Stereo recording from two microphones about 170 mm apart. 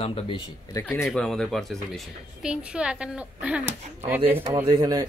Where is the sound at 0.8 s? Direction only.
20° left (ahead or behind).